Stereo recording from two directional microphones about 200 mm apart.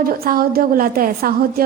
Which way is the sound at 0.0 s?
45° right (ahead or behind).